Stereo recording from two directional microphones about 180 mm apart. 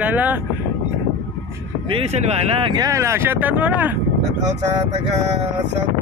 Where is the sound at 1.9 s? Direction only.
35° right (ahead or behind).